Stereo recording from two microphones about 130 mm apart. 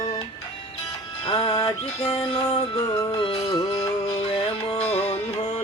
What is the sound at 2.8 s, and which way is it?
Music, 25° left (ahead or behind).